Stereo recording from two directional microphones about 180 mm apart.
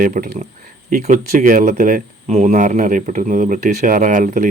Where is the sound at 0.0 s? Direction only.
50° right (ahead or behind).